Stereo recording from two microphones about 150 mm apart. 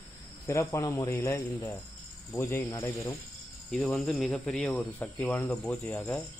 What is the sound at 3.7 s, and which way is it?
Speech, 5° left (ahead or behind).